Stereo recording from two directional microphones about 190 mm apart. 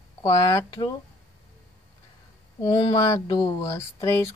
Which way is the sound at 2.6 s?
25° left (ahead or behind).